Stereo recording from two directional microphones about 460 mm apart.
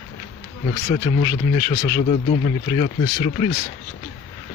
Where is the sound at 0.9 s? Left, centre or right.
Centre.